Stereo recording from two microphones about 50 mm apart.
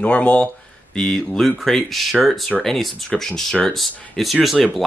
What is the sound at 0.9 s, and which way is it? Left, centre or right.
Speech, centre.